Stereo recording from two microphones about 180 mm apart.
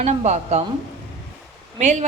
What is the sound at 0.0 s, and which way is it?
Speech, 40° right (ahead or behind).